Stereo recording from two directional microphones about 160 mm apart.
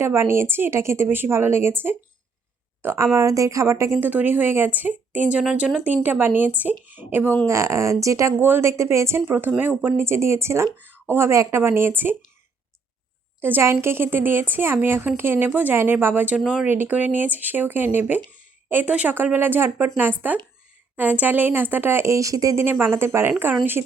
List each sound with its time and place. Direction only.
0.0 s speech: 15° right (ahead or behind)
13.4 s speech: 15° right (ahead or behind)